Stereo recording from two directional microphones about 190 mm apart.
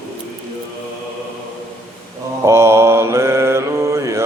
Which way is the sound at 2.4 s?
15° right (ahead or behind).